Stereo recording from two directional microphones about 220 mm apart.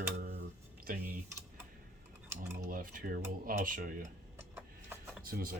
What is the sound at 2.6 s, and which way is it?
Speech, 40° right (ahead or behind).